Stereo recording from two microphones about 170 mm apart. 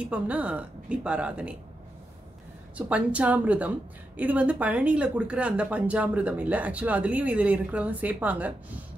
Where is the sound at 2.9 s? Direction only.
10° right (ahead or behind).